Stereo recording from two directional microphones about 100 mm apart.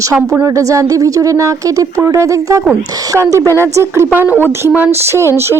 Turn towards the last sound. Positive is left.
turn(degrees=-25)  # may be behind; listen again after turning